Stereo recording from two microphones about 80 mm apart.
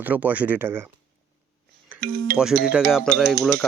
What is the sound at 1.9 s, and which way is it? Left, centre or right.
Music, right.